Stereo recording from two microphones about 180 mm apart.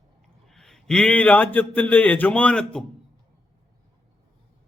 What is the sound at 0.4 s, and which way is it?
A man's voice, centre (ahead or behind).